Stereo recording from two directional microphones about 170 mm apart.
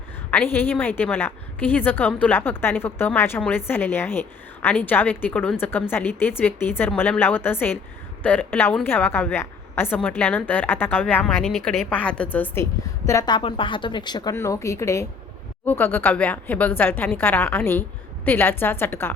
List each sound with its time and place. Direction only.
0.3 s a woman's voice: 10° left (ahead or behind)
11.4 s a woman's voice: centre (ahead or behind)